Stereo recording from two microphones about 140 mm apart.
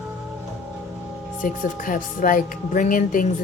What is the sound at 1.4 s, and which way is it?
Speech, 70° left (ahead or behind).